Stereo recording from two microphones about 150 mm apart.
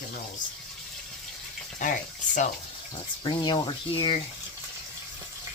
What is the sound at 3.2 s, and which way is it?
Speech, 30° left (ahead or behind).